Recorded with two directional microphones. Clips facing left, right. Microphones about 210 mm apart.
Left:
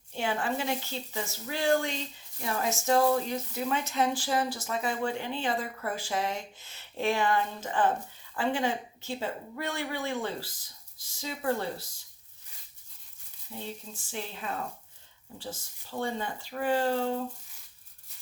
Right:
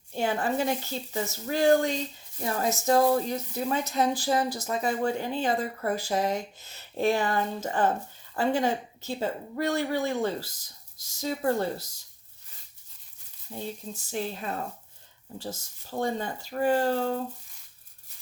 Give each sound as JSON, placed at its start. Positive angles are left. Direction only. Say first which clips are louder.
{"t": 0.1, "sound": "a woman's voice", "louder": "right 3 dB", "side_deg": -40}
{"t": 13.5, "sound": "speech", "louder": "right 4 dB", "side_deg": -45}